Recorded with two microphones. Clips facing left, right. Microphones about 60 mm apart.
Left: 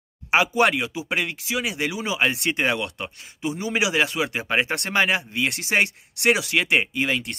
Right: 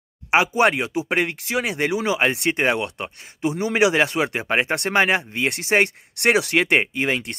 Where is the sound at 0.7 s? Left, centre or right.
Right.